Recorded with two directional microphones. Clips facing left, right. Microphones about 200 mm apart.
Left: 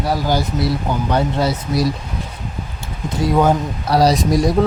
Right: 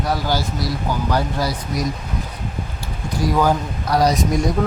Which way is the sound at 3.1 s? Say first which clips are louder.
Left 3 dB; 25° left (ahead or behind).